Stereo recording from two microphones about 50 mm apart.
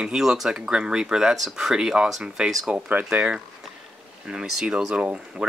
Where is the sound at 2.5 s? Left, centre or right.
Centre.